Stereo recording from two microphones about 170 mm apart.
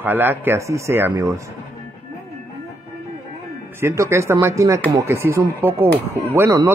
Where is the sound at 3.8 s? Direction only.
15° right (ahead or behind).